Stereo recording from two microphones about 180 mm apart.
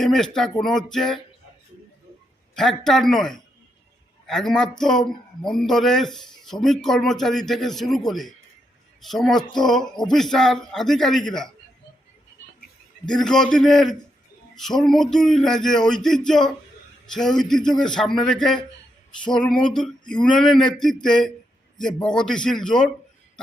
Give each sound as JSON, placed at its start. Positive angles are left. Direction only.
{"t": 0.0, "sound": "speech", "side_deg": 0}
{"t": 2.6, "sound": "speech", "side_deg": 5}
{"t": 13.1, "sound": "speech", "side_deg": 5}